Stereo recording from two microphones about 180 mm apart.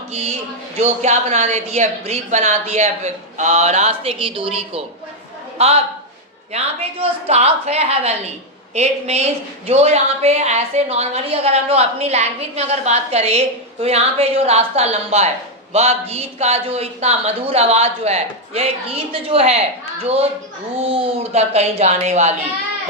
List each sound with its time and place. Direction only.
0.1 s a woman's voice: 35° right (ahead or behind)